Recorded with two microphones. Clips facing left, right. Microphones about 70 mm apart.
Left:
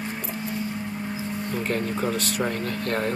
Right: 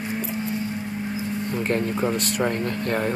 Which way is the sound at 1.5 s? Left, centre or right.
Right.